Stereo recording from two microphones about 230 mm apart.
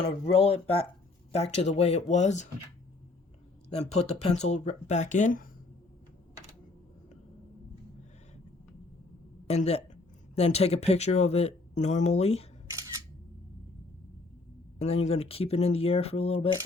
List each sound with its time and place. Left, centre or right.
0.0 s speech: left
3.7 s speech: left
9.5 s speech: left
14.8 s speech: left